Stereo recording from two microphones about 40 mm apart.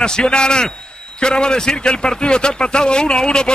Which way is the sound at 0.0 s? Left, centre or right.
Left.